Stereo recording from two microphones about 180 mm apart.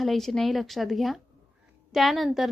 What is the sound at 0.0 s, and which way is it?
A woman's voice, centre (ahead or behind).